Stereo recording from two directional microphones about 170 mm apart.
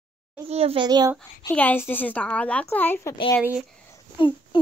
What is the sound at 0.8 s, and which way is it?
Speech, 25° right (ahead or behind).